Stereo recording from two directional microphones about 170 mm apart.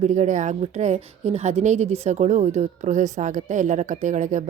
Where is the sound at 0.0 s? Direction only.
45° right (ahead or behind).